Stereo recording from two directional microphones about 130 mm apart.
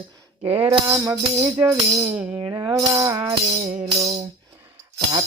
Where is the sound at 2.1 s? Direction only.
10° right (ahead or behind).